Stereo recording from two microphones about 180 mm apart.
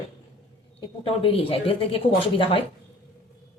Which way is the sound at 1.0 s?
30° left (ahead or behind).